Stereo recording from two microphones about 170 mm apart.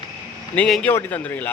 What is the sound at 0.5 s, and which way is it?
Speech, 5° left (ahead or behind).